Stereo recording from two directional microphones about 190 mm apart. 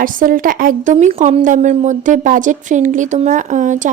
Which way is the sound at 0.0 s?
45° right (ahead or behind).